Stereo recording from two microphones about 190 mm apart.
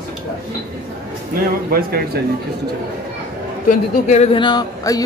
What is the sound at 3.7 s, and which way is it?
Speech, 40° left (ahead or behind).